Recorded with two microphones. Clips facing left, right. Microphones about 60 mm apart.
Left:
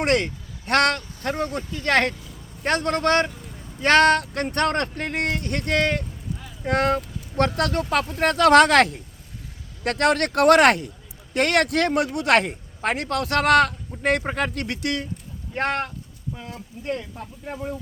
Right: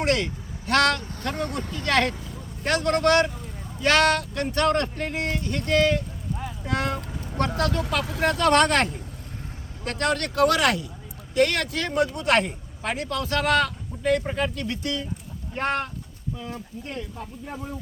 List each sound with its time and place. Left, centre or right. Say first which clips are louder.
0.0 s a man's voice: left 2 dB; left
3.8 s speech: left 4 dB; left
7.3 s speech: left 3 dB; left
8.2 s speech: left 5 dB; left
9.8 s speech: left 5 dB; left